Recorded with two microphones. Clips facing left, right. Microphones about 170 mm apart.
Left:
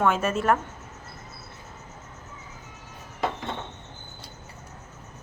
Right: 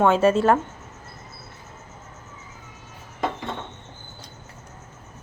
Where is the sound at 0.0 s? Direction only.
30° right (ahead or behind).